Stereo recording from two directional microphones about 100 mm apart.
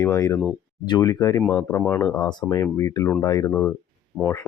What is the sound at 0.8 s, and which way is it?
Speech, 45° left (ahead or behind).